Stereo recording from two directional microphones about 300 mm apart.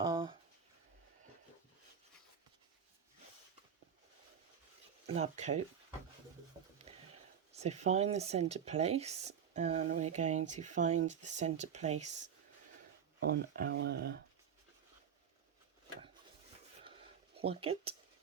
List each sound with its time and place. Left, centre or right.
0.0 s a sound: centre
5.0 s speech: right
6.9 s a sound: right
7.5 s speech: right
13.1 s speech: right
17.3 s speech: centre